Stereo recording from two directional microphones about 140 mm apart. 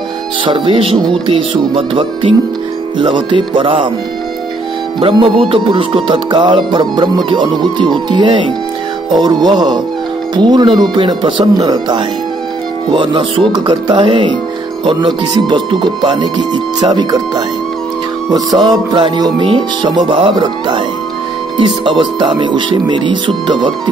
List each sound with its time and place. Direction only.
0.5 s music: 40° right (ahead or behind)
5.0 s music: 40° right (ahead or behind)
15.4 s music: 35° right (ahead or behind)
16.8 s speech: 25° right (ahead or behind)
18.3 s music: 30° right (ahead or behind)